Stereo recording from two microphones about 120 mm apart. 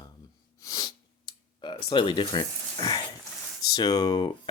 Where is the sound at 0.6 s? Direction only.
30° left (ahead or behind).